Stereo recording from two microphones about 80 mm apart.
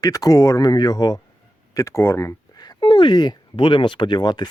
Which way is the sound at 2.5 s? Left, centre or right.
Left.